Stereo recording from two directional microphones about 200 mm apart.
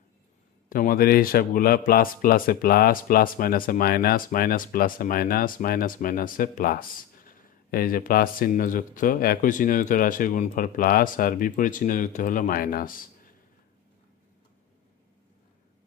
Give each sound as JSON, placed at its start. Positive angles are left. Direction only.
{"t": 0.7, "sound": "speech", "side_deg": 45}